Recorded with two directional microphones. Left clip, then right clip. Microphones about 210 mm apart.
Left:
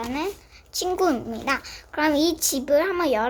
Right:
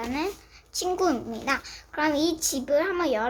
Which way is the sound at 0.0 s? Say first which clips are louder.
Left 2 dB; 5° left (ahead or behind).